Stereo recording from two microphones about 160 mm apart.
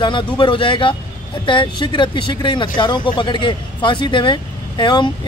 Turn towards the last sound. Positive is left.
turn(degrees=30)  # may be behind; listen again after turning